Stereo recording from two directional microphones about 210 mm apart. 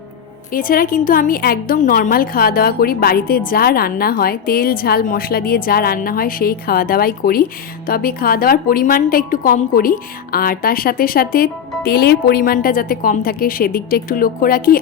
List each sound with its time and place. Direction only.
0.5 s a woman's voice: 45° left (ahead or behind)